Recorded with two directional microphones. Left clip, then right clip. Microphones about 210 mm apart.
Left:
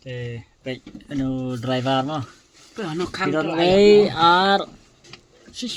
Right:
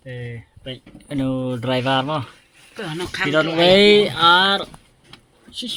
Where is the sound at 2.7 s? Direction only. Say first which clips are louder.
Right 1 dB; 15° left (ahead or behind).